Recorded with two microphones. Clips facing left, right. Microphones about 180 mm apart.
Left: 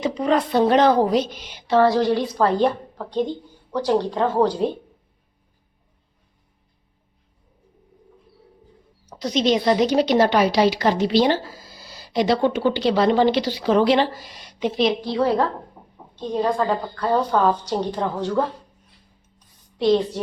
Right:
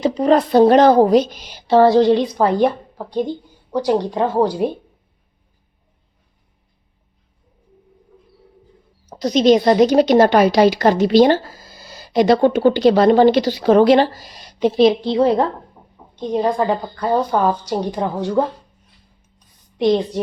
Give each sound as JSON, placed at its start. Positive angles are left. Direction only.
{"t": 0.0, "sound": "a woman's voice", "side_deg": -35}
{"t": 9.0, "sound": "a woman's voice", "side_deg": -40}
{"t": 19.8, "sound": "a woman's voice", "side_deg": -15}